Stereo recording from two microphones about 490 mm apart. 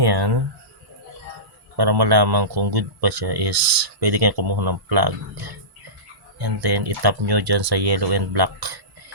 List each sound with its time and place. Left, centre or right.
0.0 s speech: right
1.7 s speech: right
6.4 s speech: right